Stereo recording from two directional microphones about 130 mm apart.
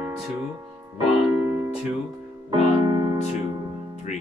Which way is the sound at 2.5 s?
35° right (ahead or behind).